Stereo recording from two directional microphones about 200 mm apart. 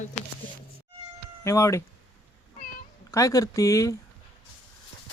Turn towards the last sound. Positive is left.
turn(degrees=15)  # may be behind; listen again after turning